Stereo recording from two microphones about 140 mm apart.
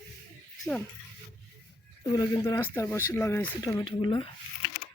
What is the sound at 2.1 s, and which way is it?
Speech, 20° left (ahead or behind).